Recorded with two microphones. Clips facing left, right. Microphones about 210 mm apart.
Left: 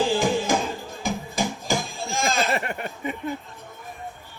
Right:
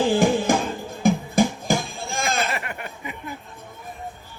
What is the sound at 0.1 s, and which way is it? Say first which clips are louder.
Music: right 3 dB; 55° right (ahead or behind).